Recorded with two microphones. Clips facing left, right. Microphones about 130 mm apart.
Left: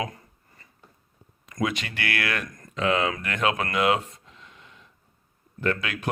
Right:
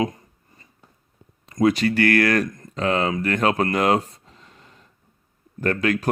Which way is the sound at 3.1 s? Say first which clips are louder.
Right 5 dB; 35° right (ahead or behind).